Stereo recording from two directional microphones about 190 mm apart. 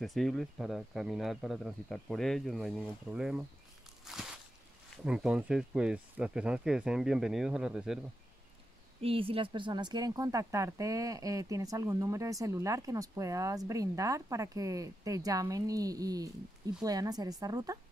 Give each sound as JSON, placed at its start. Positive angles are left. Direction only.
{"t": 0.0, "sound": "speech", "side_deg": 0}
{"t": 4.0, "sound": "a sound", "side_deg": 0}
{"t": 5.0, "sound": "speech", "side_deg": -5}
{"t": 9.0, "sound": "a woman's voice", "side_deg": -30}